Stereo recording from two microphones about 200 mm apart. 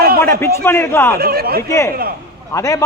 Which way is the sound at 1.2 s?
50° right (ahead or behind).